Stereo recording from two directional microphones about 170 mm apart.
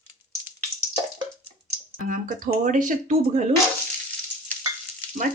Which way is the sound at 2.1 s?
50° right (ahead or behind).